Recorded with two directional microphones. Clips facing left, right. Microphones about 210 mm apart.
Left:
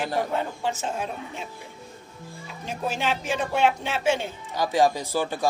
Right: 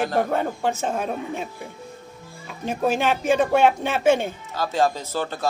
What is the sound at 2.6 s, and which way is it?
Speech, 55° right (ahead or behind).